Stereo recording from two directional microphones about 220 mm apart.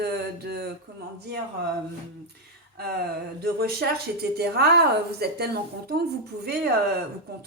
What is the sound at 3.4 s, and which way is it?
Speech, 45° right (ahead or behind).